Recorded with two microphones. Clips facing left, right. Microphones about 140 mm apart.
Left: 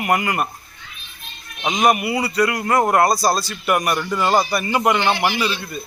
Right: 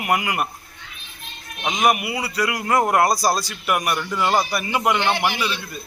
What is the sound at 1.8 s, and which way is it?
Speech, 5° right (ahead or behind).